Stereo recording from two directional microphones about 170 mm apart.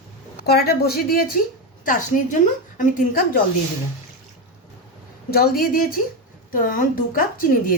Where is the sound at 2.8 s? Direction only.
50° left (ahead or behind).